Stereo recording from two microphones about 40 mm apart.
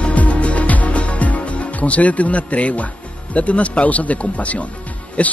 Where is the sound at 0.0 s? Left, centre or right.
Left.